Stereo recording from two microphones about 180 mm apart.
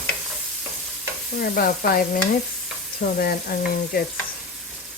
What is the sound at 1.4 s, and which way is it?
Stir, 55° left (ahead or behind).